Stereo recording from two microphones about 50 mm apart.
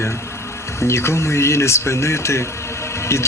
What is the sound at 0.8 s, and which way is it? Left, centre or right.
Speech, left.